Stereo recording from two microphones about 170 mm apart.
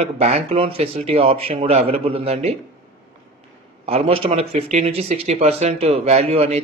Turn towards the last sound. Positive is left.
turn(degrees=-35)  # may be behind; listen again after turning